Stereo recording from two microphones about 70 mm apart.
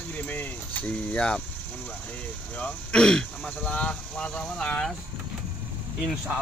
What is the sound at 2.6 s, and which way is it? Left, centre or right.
Speech, centre.